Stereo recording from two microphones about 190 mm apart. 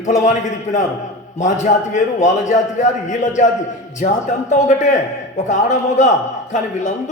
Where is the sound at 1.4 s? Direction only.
40° left (ahead or behind).